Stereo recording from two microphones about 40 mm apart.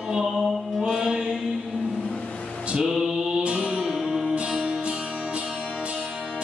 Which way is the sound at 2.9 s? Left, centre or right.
Centre.